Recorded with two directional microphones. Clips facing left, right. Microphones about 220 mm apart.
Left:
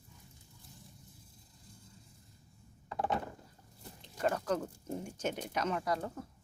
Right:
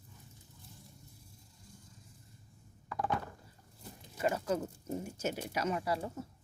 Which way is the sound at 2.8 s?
25° left (ahead or behind).